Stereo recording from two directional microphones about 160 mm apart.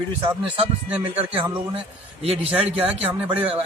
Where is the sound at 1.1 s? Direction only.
35° right (ahead or behind).